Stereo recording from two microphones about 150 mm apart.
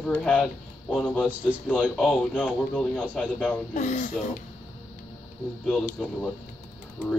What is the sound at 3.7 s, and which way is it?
Speech, 55° left (ahead or behind).